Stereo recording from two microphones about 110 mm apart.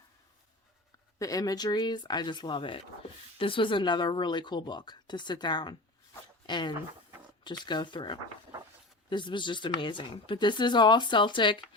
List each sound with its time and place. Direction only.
1.2 s speech: 35° left (ahead or behind)